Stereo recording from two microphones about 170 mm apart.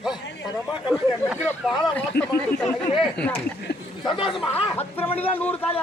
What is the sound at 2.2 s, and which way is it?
Speech, 75° left (ahead or behind).